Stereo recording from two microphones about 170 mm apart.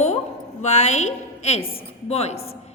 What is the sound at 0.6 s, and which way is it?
A woman's voice, 40° left (ahead or behind).